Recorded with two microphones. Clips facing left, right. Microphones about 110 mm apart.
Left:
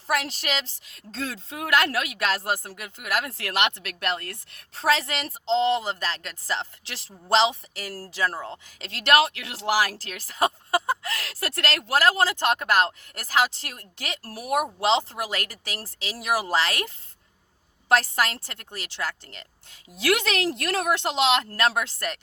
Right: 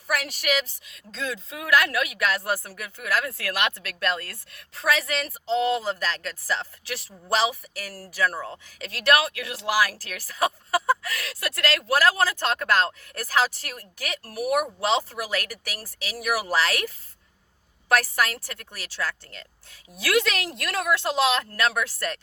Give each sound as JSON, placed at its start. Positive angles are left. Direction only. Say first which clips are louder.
{"t": 0.1, "sound": "speech", "louder": "right 1 dB", "side_deg": 25}
{"t": 17.9, "sound": "speech", "louder": "left 1 dB", "side_deg": 25}
{"t": 20.0, "sound": "speech", "louder": "even", "side_deg": 30}